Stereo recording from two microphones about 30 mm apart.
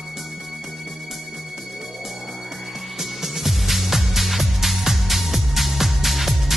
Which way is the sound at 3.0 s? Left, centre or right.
Centre.